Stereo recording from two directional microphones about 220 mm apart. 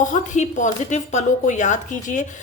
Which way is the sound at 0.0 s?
35° left (ahead or behind).